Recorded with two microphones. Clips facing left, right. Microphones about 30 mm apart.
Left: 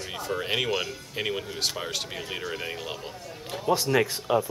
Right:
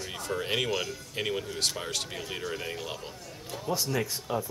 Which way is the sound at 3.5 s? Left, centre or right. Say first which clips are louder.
Left 7 dB; left.